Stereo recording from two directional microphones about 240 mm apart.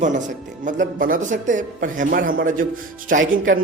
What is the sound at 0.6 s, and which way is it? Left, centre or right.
Speech, right.